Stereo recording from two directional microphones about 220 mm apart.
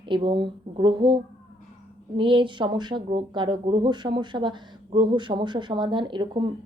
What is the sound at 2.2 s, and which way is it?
Speech, 20° right (ahead or behind).